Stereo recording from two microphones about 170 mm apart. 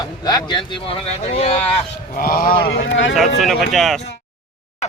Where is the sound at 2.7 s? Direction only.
80° left.